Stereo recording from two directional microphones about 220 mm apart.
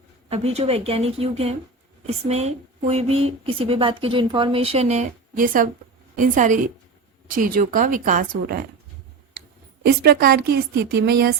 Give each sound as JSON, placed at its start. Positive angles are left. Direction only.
{"t": 0.3, "sound": "a woman's voice", "side_deg": -30}
{"t": 9.8, "sound": "a woman's voice", "side_deg": -45}